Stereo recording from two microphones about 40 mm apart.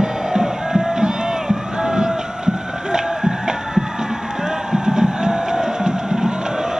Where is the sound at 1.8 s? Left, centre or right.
Centre.